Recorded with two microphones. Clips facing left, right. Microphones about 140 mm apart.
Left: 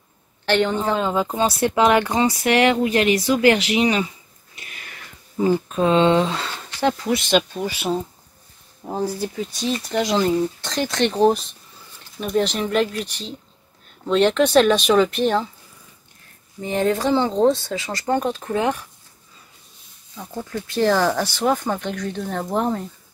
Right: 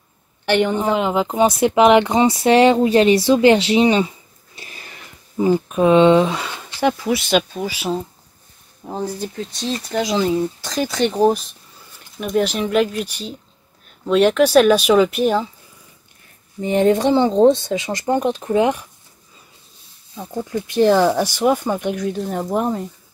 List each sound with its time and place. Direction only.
0.5 s speech: 15° right (ahead or behind)
4.6 s a sound: 30° right (ahead or behind)
5.4 s speech: 15° right (ahead or behind)
16.6 s speech: 20° right (ahead or behind)
20.4 s speech: 15° right (ahead or behind)